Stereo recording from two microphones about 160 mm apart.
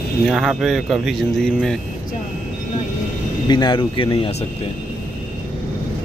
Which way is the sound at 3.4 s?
25° left (ahead or behind).